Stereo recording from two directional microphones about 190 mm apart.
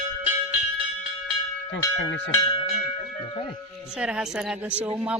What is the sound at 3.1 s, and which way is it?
Music, 35° left (ahead or behind).